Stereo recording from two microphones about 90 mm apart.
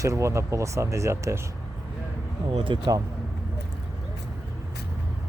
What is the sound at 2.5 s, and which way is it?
Speech, 70° right (ahead or behind).